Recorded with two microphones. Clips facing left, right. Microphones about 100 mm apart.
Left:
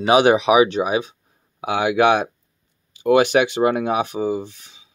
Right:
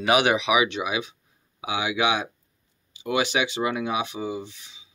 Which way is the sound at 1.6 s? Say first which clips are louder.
Left 8 dB; 55° left (ahead or behind).